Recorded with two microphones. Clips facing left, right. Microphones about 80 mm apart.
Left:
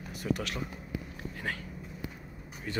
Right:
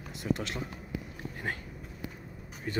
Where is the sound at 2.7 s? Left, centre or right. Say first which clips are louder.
Right 2 dB; right.